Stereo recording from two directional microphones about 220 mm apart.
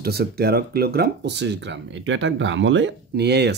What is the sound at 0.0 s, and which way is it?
Speech, 45° right (ahead or behind).